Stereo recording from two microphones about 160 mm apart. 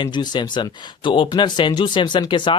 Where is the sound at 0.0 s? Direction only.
30° left (ahead or behind).